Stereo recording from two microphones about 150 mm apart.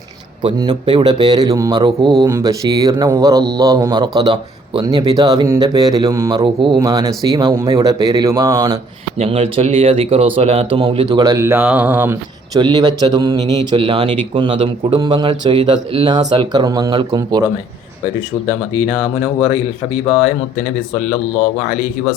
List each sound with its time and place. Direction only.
0.6 s speech: 30° right (ahead or behind)
9.1 s speech: 40° right (ahead or behind)
11.2 s speech: 20° right (ahead or behind)
12.5 s speech: 30° right (ahead or behind)